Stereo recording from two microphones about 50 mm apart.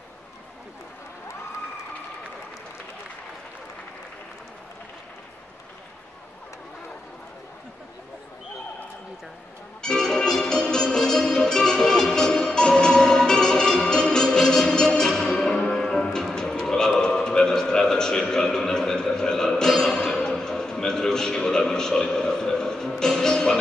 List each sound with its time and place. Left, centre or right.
9.8 s music: centre